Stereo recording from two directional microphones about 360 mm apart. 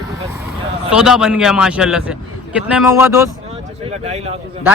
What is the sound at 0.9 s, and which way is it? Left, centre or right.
A man's voice, centre.